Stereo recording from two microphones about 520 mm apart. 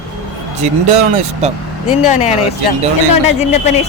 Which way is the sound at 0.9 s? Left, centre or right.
Right.